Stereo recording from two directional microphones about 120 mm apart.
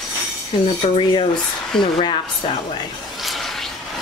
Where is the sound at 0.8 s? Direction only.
45° left (ahead or behind).